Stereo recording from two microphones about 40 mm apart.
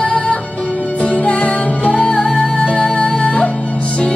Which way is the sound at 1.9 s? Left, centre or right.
Left.